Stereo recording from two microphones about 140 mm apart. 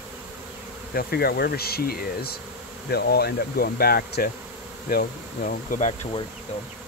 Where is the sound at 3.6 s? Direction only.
90° left.